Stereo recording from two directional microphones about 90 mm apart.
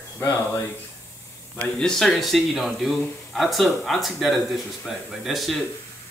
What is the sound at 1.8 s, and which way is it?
Speech, 5° left (ahead or behind).